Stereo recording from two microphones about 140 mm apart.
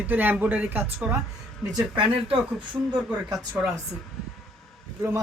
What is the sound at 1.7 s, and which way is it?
Speech, 35° right (ahead or behind).